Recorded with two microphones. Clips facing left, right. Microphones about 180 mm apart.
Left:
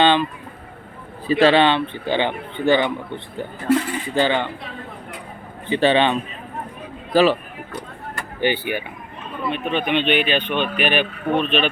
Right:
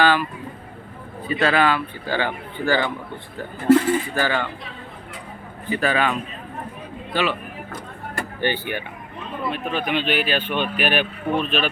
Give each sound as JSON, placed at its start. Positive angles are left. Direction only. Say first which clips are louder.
{"t": 0.0, "sound": "speech", "louder": "left 2 dB", "side_deg": 25}
{"t": 1.3, "sound": "speech", "louder": "left 5 dB", "side_deg": 30}
{"t": 4.1, "sound": "speech", "louder": "left 4 dB", "side_deg": 20}
{"t": 5.6, "sound": "speech", "louder": "left 5 dB", "side_deg": 25}
{"t": 8.4, "sound": "speech", "louder": "left 4 dB", "side_deg": 15}
{"t": 9.5, "sound": "speech", "louder": "left 3 dB", "side_deg": -5}